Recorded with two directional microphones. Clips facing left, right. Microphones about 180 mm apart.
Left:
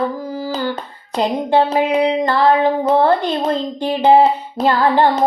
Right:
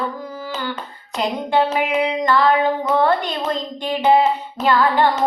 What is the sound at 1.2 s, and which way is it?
Music, 35° left (ahead or behind).